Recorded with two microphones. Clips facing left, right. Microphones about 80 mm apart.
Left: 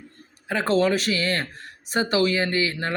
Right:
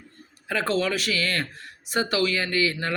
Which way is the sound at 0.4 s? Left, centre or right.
Left.